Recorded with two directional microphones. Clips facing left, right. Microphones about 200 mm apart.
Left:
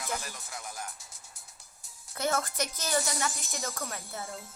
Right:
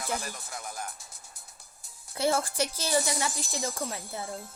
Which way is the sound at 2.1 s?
30° right (ahead or behind).